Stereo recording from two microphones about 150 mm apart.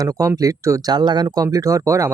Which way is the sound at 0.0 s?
25° right (ahead or behind).